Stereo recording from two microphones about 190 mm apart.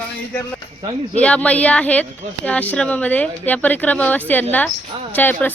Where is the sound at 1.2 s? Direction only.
5° left (ahead or behind).